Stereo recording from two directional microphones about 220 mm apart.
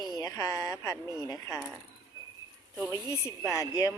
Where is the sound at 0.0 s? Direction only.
15° left (ahead or behind).